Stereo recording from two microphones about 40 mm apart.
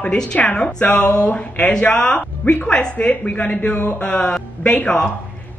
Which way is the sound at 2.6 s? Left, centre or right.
Left.